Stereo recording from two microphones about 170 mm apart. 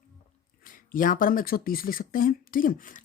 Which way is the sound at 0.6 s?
55° left (ahead or behind).